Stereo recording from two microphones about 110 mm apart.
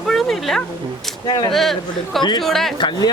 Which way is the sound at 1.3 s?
40° left (ahead or behind).